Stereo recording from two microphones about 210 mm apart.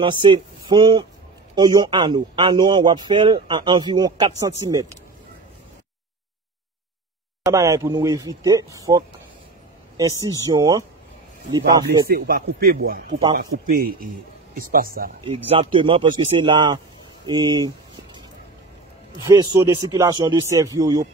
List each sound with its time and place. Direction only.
0.0 s a man's voice: 20° right (ahead or behind)
7.4 s speech: 15° right (ahead or behind)
12.1 s a man's voice: 45° right (ahead or behind)
15.2 s a man's voice: 25° right (ahead or behind)
19.2 s speech: 15° right (ahead or behind)